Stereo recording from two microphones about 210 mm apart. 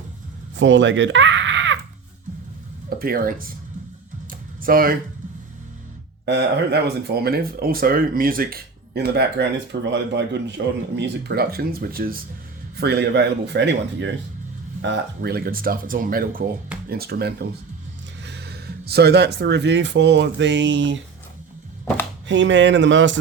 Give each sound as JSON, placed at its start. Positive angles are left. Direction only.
{"t": 0.5, "sound": "speech", "side_deg": -60}
{"t": 3.0, "sound": "speech", "side_deg": -45}
{"t": 4.3, "sound": "computer keyboard", "side_deg": -40}
{"t": 6.2, "sound": "speech", "side_deg": -55}
{"t": 22.3, "sound": "speech", "side_deg": -60}